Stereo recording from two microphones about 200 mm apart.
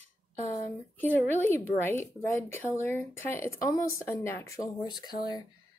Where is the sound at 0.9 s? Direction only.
10° left (ahead or behind).